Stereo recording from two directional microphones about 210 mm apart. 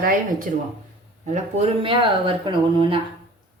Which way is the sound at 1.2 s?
30° right (ahead or behind).